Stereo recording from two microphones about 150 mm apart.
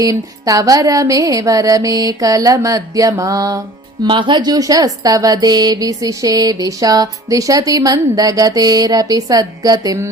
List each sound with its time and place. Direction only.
0.0 s speech: 25° right (ahead or behind)